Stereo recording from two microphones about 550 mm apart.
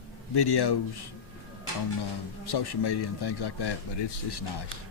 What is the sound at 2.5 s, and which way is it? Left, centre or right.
Speech, left.